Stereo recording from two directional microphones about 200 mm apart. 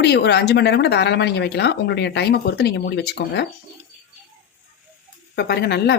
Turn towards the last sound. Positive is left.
turn(degrees=55)  # may be behind; listen again after turning